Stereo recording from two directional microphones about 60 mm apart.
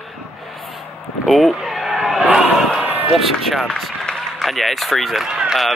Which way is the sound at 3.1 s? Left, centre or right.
Centre.